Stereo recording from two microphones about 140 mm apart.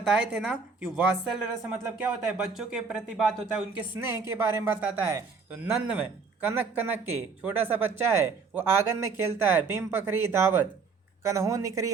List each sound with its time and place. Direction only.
0.0 s a woman's voice: 10° right (ahead or behind)
3.8 s a woman's voice: 15° right (ahead or behind)